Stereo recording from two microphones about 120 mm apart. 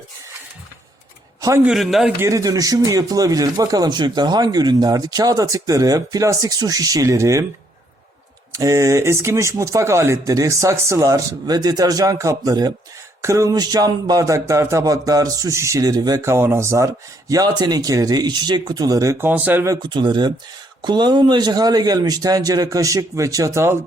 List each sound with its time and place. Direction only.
1.4 s a sound: 25° right (ahead or behind)
1.6 s a man's voice: centre (ahead or behind)
2.2 s speech: 30° right (ahead or behind)
8.5 s speech: 30° right (ahead or behind)
19.3 s speech: 15° right (ahead or behind)
19.7 s speech: 40° right (ahead or behind)